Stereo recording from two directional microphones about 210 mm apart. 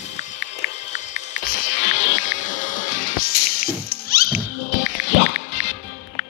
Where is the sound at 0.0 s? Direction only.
35° left (ahead or behind).